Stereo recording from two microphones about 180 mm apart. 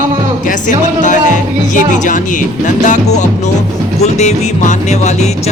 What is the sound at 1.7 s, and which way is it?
Music, 45° left (ahead or behind).